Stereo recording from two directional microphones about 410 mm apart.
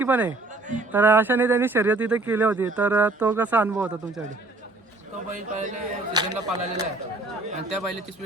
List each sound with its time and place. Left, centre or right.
0.0 s speech: centre
5.3 s speech: centre